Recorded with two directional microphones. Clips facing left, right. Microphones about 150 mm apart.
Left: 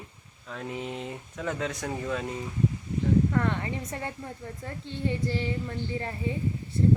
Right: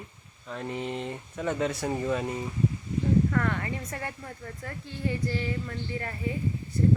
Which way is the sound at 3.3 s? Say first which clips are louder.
Left 1 dB; 20° left (ahead or behind).